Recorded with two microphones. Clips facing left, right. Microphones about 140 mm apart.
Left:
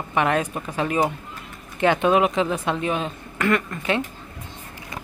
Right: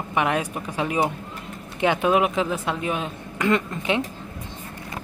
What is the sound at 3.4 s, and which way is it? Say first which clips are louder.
Speech: even; 20° right (ahead or behind).